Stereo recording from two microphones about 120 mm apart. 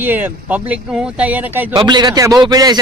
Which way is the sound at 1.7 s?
35° right (ahead or behind).